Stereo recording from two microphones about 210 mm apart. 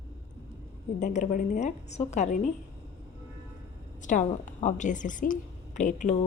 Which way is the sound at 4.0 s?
35° left (ahead or behind).